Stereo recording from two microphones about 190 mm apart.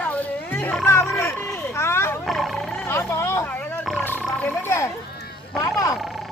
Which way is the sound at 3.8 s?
Centre (ahead or behind).